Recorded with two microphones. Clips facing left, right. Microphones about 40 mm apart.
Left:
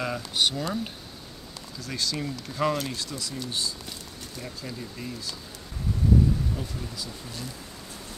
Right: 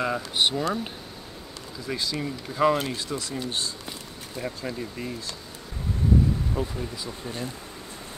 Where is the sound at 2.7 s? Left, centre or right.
Right.